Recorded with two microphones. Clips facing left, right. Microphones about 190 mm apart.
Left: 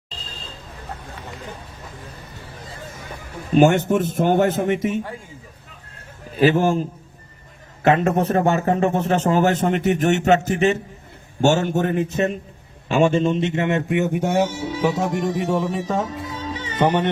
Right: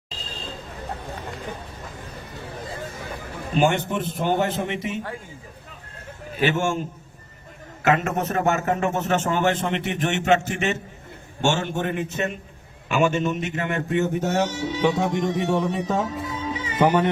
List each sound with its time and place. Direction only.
3.5 s a man's voice: 45° left (ahead or behind)
6.4 s a man's voice: 35° left (ahead or behind); by 16.6 s centre (ahead or behind)